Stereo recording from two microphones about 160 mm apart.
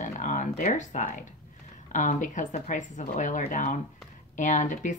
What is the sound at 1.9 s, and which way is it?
Speech, 50° left (ahead or behind).